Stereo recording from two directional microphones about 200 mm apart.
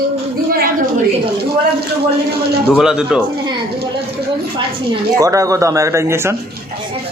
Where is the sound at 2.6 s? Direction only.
5° right (ahead or behind).